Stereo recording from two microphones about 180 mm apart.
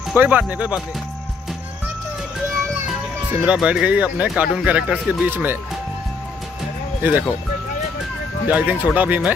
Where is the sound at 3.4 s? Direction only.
5° right (ahead or behind).